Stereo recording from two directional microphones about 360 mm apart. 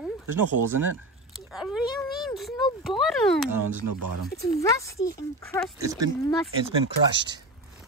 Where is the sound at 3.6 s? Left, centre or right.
Right.